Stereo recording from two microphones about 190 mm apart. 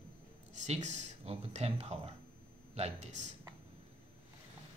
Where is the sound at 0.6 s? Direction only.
40° right (ahead or behind).